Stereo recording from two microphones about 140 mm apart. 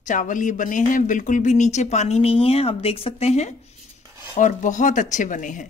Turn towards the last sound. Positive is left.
turn(degrees=65)  # may be behind; listen again after turning